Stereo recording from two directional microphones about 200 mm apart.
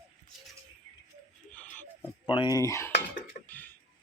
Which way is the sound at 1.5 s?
10° left (ahead or behind).